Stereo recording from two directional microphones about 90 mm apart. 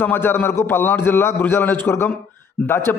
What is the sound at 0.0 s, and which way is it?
A man's voice, 25° left (ahead or behind).